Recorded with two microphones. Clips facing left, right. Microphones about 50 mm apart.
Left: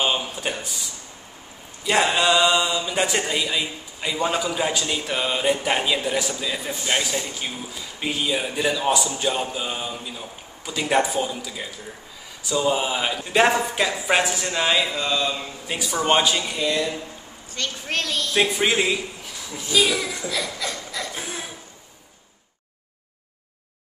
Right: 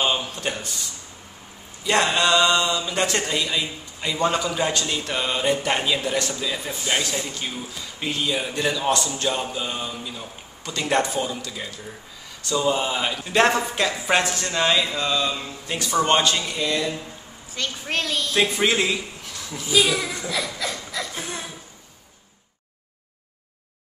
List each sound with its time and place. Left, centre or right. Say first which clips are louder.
0.0 s speech: even; centre
1.9 s speech: even; centre
19.6 s speech: even; centre